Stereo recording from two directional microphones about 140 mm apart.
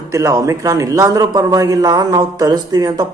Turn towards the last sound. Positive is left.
turn(degrees=-25)  # may be behind; listen again after turning